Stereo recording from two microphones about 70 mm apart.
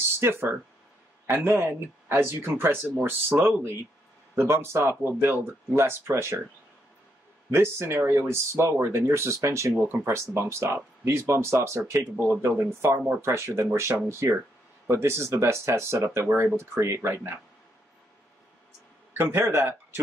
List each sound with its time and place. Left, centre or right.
0.2 s speech: right
7.5 s speech: right
19.1 s speech: right